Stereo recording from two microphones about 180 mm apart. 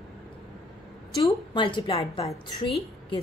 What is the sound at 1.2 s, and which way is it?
A woman's voice, 25° left (ahead or behind).